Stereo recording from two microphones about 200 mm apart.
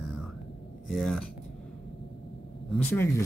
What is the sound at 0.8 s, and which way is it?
Speech, centre (ahead or behind).